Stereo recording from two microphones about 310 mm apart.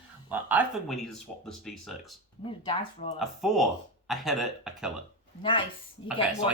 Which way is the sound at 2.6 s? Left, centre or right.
Centre.